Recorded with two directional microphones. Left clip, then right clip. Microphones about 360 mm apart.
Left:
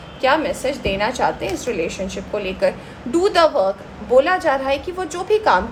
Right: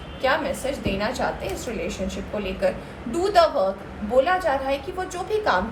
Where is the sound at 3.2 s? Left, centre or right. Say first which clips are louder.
Left 3 dB; left.